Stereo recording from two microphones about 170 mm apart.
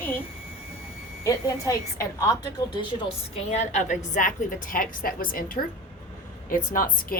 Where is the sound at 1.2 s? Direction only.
20° left (ahead or behind).